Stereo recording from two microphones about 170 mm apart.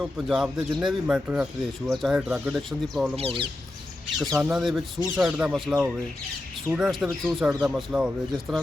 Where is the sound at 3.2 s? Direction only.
35° right (ahead or behind).